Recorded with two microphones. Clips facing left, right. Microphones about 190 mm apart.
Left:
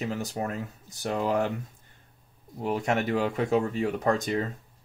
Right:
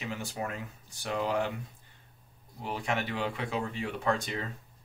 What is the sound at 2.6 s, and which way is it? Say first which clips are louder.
Speech: left 6 dB; 45° left (ahead or behind).